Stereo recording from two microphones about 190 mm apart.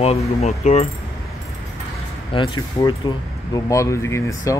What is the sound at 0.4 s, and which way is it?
Speech, 35° left (ahead or behind).